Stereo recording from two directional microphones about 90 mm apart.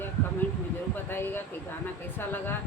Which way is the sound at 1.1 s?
25° left (ahead or behind).